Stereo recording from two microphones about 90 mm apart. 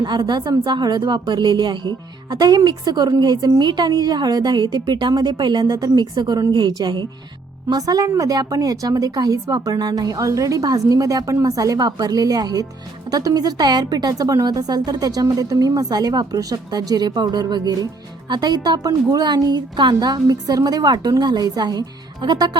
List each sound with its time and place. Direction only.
0.0 s a woman's voice: 55° right (ahead or behind)